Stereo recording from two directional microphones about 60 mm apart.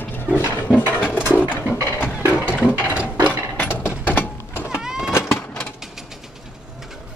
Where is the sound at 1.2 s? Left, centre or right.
Centre.